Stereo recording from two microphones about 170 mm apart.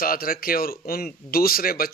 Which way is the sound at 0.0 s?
60° left (ahead or behind).